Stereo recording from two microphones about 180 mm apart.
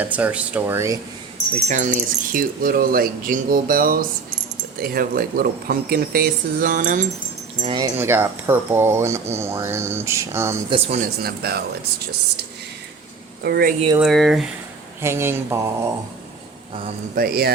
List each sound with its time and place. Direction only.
0.0 s speech: 10° right (ahead or behind)
1.7 s speech: 45° right (ahead or behind)
7.6 s speech: 25° right (ahead or behind)
7.9 s speech: 15° right (ahead or behind)
10.7 s speech: 35° right (ahead or behind)
11.2 s speech: 60° right (ahead or behind)
13.4 s speech: 60° right (ahead or behind)
14.0 s speech: centre (ahead or behind)
15.0 s speech: 15° right (ahead or behind)
17.2 s speech: 55° right (ahead or behind)